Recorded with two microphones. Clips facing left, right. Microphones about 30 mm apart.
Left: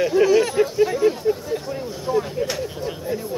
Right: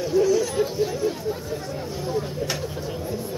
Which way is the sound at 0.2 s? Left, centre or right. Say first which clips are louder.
Left 4 dB; left.